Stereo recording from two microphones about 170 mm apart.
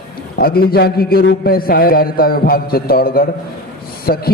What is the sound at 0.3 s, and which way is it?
A man's voice, 65° left (ahead or behind).